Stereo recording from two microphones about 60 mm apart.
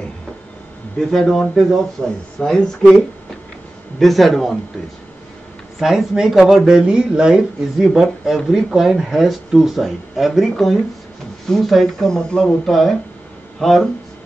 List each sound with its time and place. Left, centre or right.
0.9 s speech: centre
2.0 s speech: centre
4.0 s speech: centre
5.8 s speech: centre